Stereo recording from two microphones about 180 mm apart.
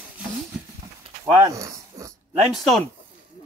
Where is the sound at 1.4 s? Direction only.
20° right (ahead or behind).